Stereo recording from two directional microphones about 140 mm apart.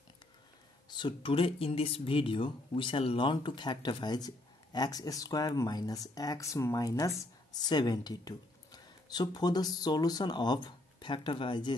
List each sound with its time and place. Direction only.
0.8 s speech: 35° left (ahead or behind)